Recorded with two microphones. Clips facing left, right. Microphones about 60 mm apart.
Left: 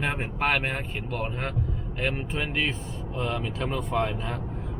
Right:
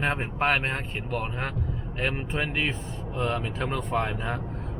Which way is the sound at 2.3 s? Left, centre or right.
Right.